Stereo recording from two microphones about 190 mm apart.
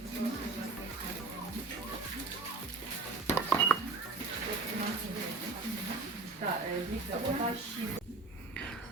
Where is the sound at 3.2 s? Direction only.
10° left (ahead or behind).